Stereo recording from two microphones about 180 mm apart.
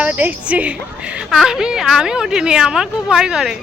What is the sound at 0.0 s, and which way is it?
A woman's voice, 10° right (ahead or behind).